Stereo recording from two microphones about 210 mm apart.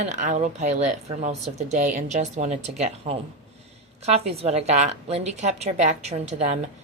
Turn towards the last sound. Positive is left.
turn(degrees=-35)  # may be behind; listen again after turning